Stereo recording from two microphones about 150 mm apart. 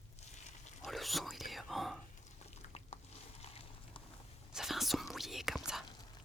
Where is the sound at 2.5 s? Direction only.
45° left (ahead or behind).